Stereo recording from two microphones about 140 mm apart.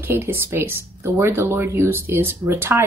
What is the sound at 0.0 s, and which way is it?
Speech, 15° right (ahead or behind).